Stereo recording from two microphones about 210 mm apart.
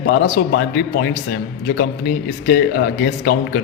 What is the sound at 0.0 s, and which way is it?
A man's voice, 50° left (ahead or behind).